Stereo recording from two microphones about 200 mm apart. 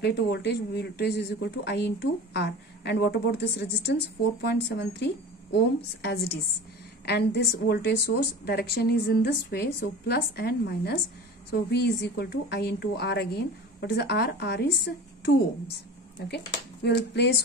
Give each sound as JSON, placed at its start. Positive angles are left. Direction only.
{"t": 0.0, "sound": "a woman's voice", "side_deg": 55}
{"t": 16.8, "sound": "speech", "side_deg": 55}